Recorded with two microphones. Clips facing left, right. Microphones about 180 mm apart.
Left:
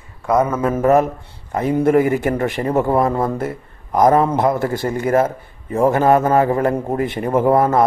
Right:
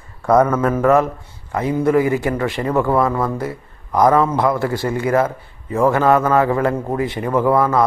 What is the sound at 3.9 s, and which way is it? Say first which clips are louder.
Speech: left 1 dB; 20° left (ahead or behind).